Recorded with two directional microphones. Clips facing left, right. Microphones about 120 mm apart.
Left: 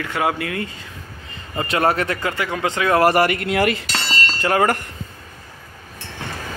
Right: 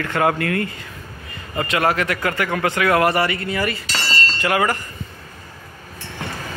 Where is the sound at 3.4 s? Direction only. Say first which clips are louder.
Left 4 dB; 70° left (ahead or behind).